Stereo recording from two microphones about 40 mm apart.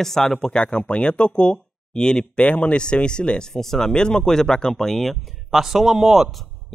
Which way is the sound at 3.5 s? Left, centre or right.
Centre.